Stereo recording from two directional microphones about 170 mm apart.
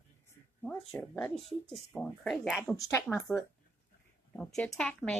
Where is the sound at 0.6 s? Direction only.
5° left (ahead or behind).